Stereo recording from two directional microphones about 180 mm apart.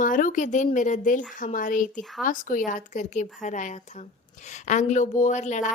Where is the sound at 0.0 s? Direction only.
45° left (ahead or behind).